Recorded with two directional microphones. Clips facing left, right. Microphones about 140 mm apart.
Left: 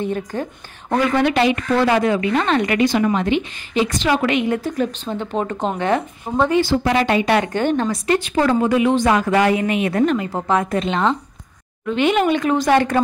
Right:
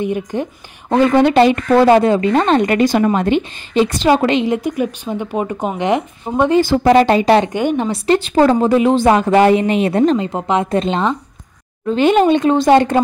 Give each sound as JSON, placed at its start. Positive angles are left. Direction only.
{"t": 0.0, "sound": "speech", "side_deg": -15}
{"t": 3.7, "sound": "a woman's voice", "side_deg": -30}
{"t": 4.6, "sound": "speech", "side_deg": -15}
{"t": 6.6, "sound": "speech", "side_deg": -45}
{"t": 7.4, "sound": "speech", "side_deg": -15}
{"t": 7.9, "sound": "a woman's voice", "side_deg": -30}